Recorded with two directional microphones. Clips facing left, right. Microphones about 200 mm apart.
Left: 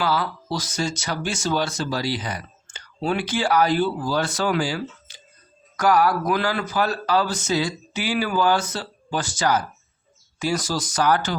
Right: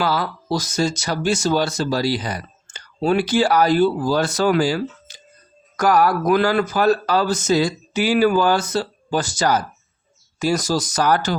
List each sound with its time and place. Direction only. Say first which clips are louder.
0.0 s speech: right 2 dB; 40° right (ahead or behind)